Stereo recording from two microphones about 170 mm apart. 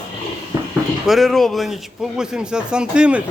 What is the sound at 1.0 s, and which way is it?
A man's voice, centre (ahead or behind).